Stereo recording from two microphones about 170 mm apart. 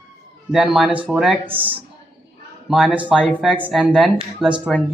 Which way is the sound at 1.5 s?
30° right (ahead or behind).